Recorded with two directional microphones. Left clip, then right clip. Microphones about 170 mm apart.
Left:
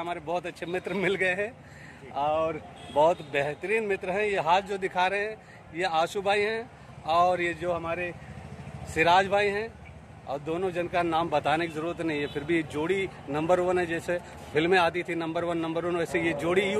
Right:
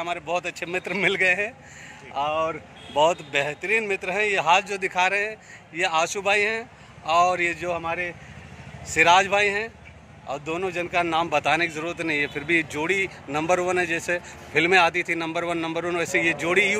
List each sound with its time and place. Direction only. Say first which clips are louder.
0.0 s a man's voice: right 4 dB; 10° right (ahead or behind)